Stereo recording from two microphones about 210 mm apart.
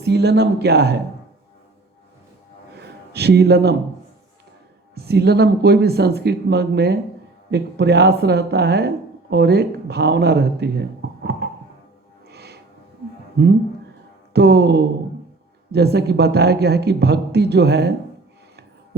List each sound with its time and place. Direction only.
0.0 s speech: 50° right (ahead or behind)
2.7 s a sound: 50° right (ahead or behind)
4.9 s speech: 50° right (ahead or behind)
12.3 s music: 50° right (ahead or behind)
14.3 s speech: 50° right (ahead or behind)